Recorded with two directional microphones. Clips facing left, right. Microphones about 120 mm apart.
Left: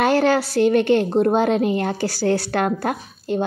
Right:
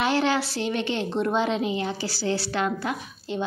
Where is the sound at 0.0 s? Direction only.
45° left (ahead or behind).